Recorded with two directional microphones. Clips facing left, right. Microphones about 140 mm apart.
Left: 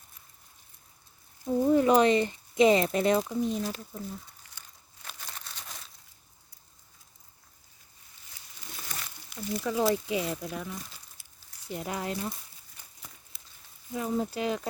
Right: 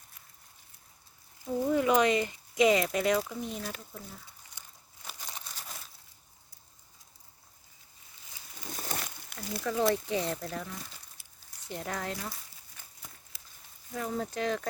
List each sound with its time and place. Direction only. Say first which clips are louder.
1.7 s speech: left 3 dB; 35° left (ahead or behind); by 3.7 s 20° left (ahead or behind)
5.0 s crumpling: even; 10° right (ahead or behind)
8.7 s a sound: right 5 dB; 45° right (ahead or behind)
9.6 s speech: left 1 dB; 10° left (ahead or behind)
13.9 s speech: left 3 dB; 15° left (ahead or behind)